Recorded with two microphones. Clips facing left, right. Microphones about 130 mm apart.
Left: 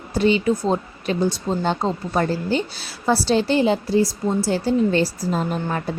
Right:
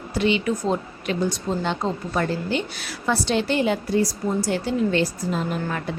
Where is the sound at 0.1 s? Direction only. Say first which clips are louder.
Left 4 dB; 40° left (ahead or behind).